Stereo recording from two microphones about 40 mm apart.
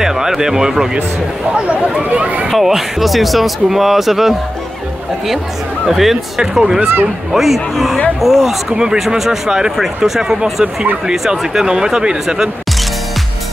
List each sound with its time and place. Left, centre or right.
0.0 s speech: centre
1.6 s speech: right
2.6 s speech: centre
5.9 s speech: centre
8.6 s speech: centre
9.0 s speech: centre
10.3 s speech: right